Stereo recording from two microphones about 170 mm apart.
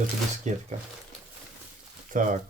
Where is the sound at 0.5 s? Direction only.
45° right (ahead or behind).